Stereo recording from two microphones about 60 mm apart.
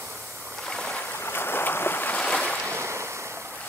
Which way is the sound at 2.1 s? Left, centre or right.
Centre.